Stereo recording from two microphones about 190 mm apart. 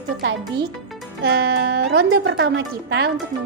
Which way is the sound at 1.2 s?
55° right (ahead or behind).